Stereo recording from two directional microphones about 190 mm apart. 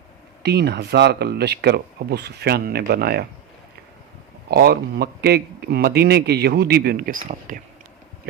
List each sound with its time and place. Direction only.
0.4 s speech: 60° right (ahead or behind)
4.4 s speech: 55° right (ahead or behind)